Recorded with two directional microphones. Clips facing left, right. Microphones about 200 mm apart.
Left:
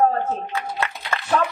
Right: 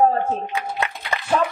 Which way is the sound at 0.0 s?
15° right (ahead or behind).